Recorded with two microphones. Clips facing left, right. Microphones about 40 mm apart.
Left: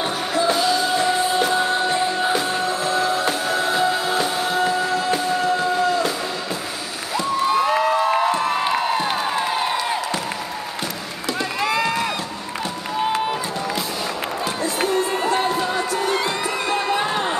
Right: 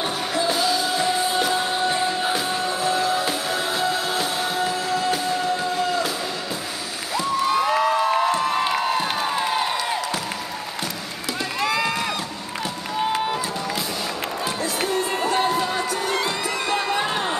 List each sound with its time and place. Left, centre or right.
0.0 s music: centre
7.2 s cheering: centre
11.6 s run: centre
14.6 s crowd: centre
15.3 s a sound: centre
15.9 s music: centre
16.2 s music: left
17.0 s a sound: centre